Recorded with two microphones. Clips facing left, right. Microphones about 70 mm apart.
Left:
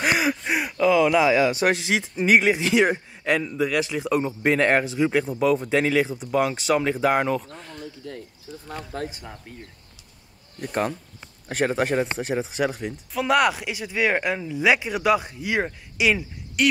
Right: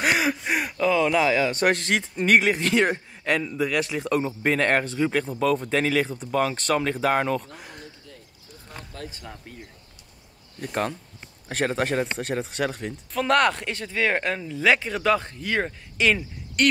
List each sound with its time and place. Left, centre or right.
0.0 s speech: centre
7.4 s speech: centre
8.0 s speech: left
10.6 s speech: centre